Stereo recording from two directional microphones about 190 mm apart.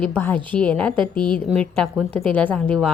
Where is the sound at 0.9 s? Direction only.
25° right (ahead or behind).